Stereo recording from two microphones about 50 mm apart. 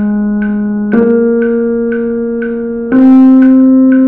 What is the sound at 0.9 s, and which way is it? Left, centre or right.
Keyboard, centre.